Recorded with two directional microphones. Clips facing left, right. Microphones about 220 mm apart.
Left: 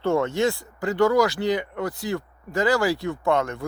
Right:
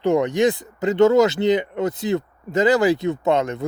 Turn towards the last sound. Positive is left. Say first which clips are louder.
# right 3 dB
turn(degrees=-20)  # may be behind; listen again after turning